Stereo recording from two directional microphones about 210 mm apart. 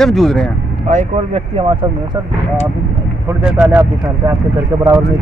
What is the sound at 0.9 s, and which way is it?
Speech, 35° right (ahead or behind).